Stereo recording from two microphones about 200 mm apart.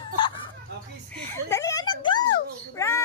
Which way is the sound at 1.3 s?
15° left (ahead or behind).